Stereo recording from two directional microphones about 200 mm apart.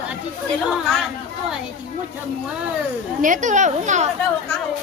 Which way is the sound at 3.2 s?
40° right (ahead or behind).